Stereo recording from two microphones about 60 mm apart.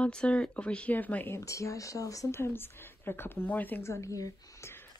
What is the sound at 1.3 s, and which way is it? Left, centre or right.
Speech, left.